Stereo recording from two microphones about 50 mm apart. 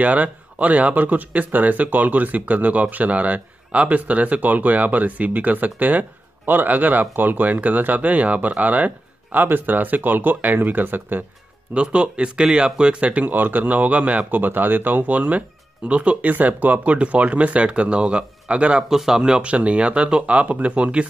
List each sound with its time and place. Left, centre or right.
0.0 s speech: right
11.7 s speech: right
13.1 s speech: right
18.9 s speech: centre